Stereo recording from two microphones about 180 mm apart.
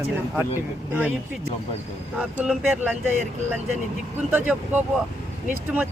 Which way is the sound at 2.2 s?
5° right (ahead or behind).